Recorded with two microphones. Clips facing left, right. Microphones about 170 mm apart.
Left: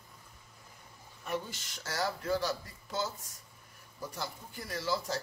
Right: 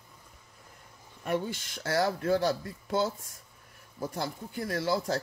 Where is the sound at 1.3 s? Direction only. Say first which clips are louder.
Right 6 dB; 55° right (ahead or behind).